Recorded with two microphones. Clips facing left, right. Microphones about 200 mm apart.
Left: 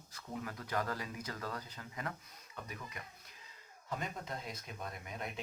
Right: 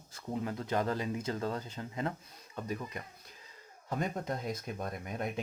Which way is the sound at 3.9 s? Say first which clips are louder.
Right 7 dB; 45° right (ahead or behind).